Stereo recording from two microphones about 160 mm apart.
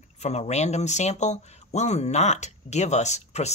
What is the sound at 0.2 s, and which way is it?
Speech, 45° left (ahead or behind).